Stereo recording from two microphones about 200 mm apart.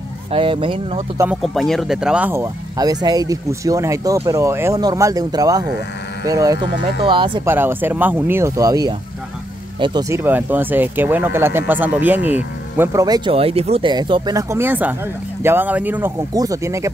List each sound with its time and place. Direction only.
0.3 s speech: 25° right (ahead or behind)
1.1 s speech: 10° right (ahead or behind)
1.4 s speech: centre (ahead or behind); by 7.4 s 25° right (ahead or behind)
7.4 s speech: 10° right (ahead or behind)